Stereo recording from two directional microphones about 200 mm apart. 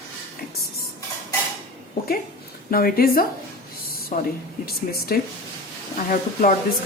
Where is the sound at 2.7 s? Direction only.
50° left (ahead or behind).